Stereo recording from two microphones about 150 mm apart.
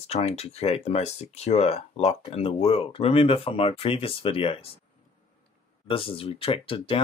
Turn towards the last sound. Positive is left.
turn(degrees=35)  # may be behind; listen again after turning